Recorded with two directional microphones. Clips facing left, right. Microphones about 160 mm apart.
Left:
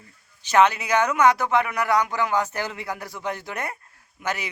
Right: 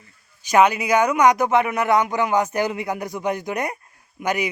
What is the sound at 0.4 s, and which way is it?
Speech, 10° right (ahead or behind).